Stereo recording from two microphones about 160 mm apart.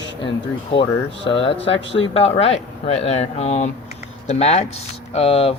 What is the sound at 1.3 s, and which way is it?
Speech, 35° left (ahead or behind).